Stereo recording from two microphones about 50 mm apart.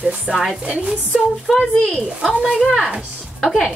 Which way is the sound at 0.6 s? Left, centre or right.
Right.